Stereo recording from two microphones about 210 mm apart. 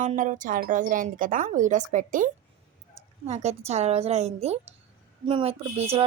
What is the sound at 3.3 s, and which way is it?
A woman's voice, 30° right (ahead or behind).